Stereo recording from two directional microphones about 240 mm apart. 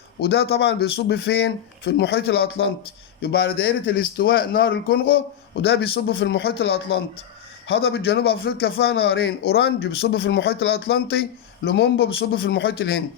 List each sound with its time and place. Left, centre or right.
0.2 s a man's voice: left